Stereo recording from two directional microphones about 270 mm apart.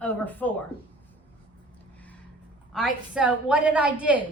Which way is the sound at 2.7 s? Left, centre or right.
Centre.